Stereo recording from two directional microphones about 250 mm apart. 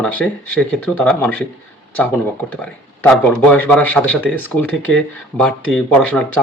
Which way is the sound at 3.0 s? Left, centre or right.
Centre.